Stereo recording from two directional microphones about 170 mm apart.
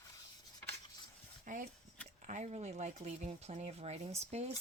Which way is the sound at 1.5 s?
50° right (ahead or behind).